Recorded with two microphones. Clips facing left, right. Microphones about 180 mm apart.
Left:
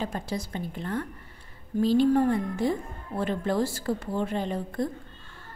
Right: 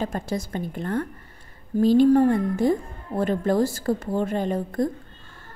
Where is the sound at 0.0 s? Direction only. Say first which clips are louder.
Right 4 dB; 45° right (ahead or behind).